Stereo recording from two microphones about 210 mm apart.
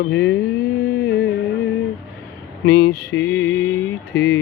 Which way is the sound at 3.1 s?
65° left (ahead or behind).